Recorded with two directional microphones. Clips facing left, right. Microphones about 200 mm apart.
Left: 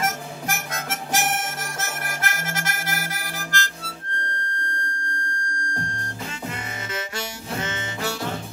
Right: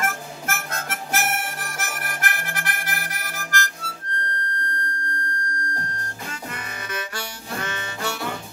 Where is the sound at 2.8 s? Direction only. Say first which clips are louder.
Left 2 dB; 25° left (ahead or behind).